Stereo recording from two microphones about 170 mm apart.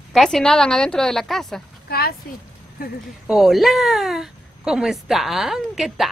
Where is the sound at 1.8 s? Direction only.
65° left (ahead or behind).